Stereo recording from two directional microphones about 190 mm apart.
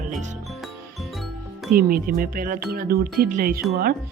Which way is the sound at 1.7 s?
50° right (ahead or behind).